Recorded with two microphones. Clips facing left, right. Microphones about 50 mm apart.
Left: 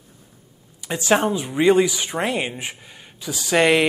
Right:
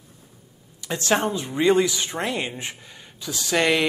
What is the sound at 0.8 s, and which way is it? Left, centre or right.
Speech, centre.